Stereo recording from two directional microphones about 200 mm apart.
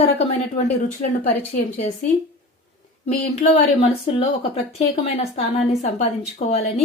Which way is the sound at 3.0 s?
35° left (ahead or behind).